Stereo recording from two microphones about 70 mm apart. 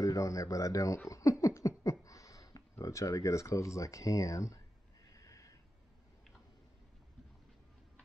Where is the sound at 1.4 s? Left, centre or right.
Left.